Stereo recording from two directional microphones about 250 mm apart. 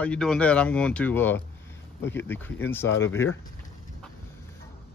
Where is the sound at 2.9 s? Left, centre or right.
Left.